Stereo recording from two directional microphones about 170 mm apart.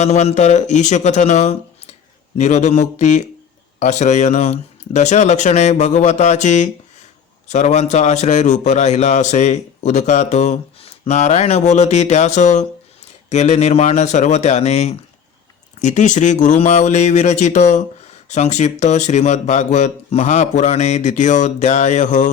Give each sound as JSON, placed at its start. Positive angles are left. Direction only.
{"t": 0.0, "sound": "a man's voice", "side_deg": 40}